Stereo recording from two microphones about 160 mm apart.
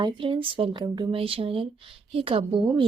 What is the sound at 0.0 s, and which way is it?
Speech, 35° right (ahead or behind).